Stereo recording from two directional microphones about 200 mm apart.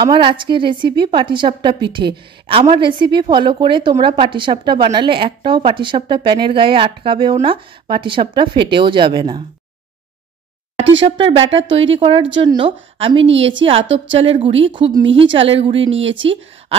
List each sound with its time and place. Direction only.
0.0 s a woman's voice: 25° right (ahead or behind)
10.8 s a sound: 70° right (ahead or behind)
11.1 s a woman's voice: 30° right (ahead or behind)
16.1 s speech: 70° right (ahead or behind)